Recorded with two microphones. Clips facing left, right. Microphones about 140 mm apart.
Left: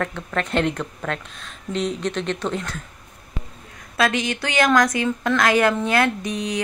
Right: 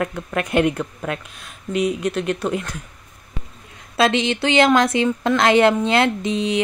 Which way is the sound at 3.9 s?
25° right (ahead or behind).